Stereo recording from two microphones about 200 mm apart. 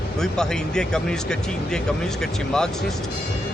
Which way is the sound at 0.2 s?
5° left (ahead or behind).